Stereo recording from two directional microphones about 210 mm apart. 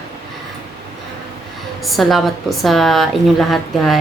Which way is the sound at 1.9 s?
Centre (ahead or behind).